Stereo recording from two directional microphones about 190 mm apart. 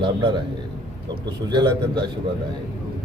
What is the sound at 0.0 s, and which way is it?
Speech, 25° right (ahead or behind).